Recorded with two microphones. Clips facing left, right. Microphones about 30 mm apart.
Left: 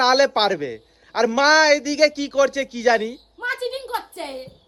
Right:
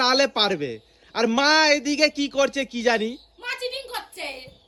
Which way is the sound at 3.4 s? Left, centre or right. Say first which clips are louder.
Left 4 dB; right.